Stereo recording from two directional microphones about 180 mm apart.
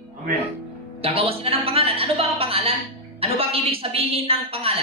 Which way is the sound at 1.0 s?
30° right (ahead or behind).